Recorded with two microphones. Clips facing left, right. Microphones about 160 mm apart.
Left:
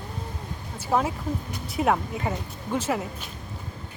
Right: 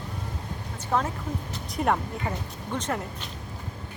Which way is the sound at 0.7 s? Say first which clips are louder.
Left 3 dB; 10° left (ahead or behind).